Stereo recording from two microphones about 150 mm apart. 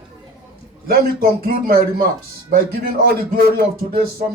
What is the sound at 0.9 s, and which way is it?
Speech, 80° right.